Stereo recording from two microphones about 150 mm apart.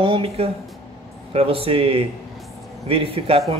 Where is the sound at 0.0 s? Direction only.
40° right (ahead or behind).